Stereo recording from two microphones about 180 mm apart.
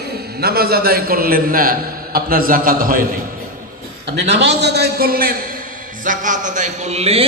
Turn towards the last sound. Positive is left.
turn(degrees=-35)  # may be behind; listen again after turning